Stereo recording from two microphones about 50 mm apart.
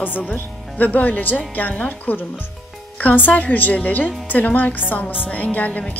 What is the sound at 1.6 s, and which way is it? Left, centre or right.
Music, left.